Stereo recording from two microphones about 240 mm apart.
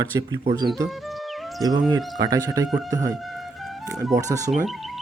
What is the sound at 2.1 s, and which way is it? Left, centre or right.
Speech, centre.